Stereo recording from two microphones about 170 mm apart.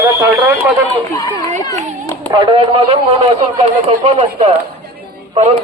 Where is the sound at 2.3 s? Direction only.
30° right (ahead or behind).